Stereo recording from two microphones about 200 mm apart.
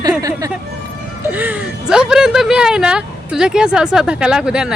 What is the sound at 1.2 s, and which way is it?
Speech, 10° right (ahead or behind).